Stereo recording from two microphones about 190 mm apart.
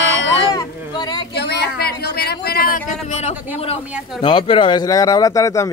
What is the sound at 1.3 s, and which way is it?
Speech, 60° left (ahead or behind).